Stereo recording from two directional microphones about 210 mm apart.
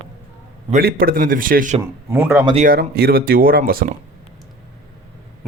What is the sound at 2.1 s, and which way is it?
Speech, 10° right (ahead or behind).